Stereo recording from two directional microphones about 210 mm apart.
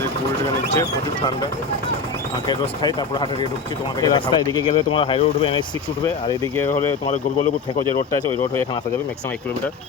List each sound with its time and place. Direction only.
2.5 s speech: 20° left (ahead or behind)